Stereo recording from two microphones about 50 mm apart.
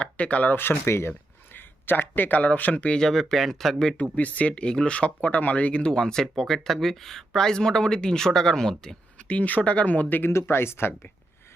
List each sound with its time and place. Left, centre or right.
0.0 s speech: left
0.5 s speech: left
1.5 s speech: left
3.0 s speech: centre
3.9 s speech: left
6.0 s speech: centre
9.1 s speech: left
10.3 s speech: left